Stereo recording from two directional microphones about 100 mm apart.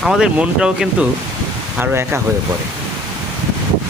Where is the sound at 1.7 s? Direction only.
20° right (ahead or behind).